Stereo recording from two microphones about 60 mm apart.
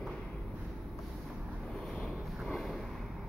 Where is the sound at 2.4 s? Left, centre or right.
Centre.